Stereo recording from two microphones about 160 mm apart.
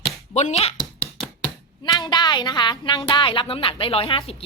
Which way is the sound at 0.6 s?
35° left (ahead or behind).